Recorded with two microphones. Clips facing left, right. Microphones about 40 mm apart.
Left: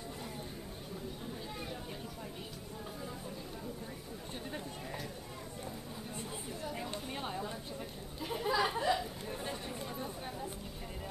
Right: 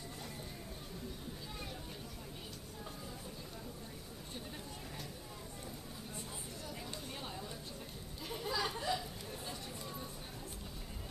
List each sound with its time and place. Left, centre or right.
6.6 s chatter: left
8.2 s goat: centre
9.4 s a sound: left